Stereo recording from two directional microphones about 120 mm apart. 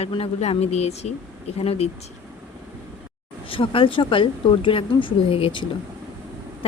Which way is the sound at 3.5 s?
50° left (ahead or behind).